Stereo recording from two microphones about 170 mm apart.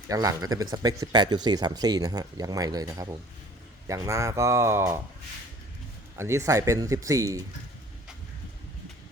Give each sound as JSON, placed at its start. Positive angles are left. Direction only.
{"t": 0.1, "sound": "speech", "side_deg": -20}
{"t": 6.1, "sound": "speech", "side_deg": -15}